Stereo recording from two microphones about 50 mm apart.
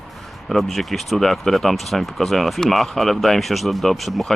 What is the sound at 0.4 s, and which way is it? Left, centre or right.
Speech, centre.